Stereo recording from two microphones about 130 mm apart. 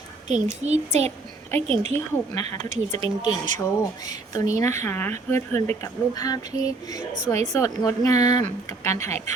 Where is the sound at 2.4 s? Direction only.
65° right (ahead or behind).